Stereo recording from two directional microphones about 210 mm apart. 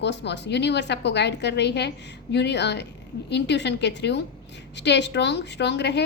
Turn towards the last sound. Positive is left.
turn(degrees=55)  # may be behind; listen again after turning